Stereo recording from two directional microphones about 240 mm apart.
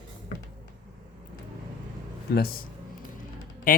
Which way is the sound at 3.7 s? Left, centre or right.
Left.